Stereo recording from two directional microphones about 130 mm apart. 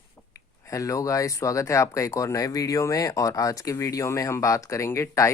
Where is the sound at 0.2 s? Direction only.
15° left (ahead or behind).